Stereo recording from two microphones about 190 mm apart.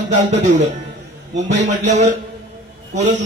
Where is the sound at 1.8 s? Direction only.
40° right (ahead or behind).